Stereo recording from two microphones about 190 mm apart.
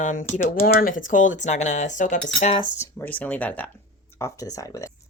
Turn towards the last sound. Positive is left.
turn(degrees=15)  # may be behind; listen again after turning